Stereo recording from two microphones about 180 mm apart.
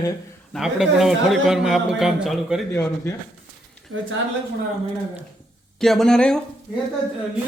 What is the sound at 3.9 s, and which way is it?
Speech, 90° right.